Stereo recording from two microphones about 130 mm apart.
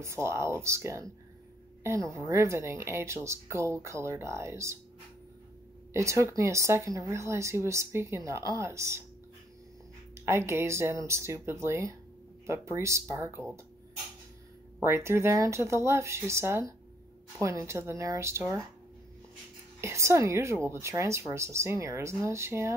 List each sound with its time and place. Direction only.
0.0 s speech: 20° right (ahead or behind)
5.9 s speech: 20° right (ahead or behind)
10.1 s speech: 20° right (ahead or behind)
14.8 s speech: 20° right (ahead or behind)
19.8 s speech: 20° right (ahead or behind)